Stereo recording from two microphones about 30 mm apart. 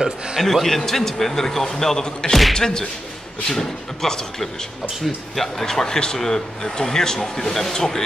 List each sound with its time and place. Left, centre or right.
0.4 s speech: centre
2.5 s speech: left